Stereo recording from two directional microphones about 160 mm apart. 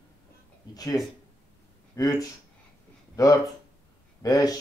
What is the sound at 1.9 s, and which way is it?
Speech, 20° left (ahead or behind).